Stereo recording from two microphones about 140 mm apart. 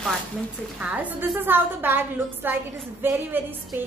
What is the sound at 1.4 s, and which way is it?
A woman's voice, 15° right (ahead or behind).